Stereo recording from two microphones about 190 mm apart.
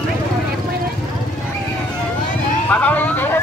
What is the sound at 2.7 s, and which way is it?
Speech, 10° left (ahead or behind).